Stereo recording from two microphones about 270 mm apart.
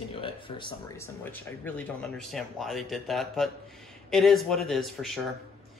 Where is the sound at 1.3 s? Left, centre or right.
Centre.